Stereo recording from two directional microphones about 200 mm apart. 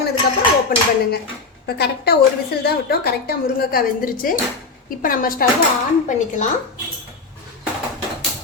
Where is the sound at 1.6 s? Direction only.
55° left (ahead or behind).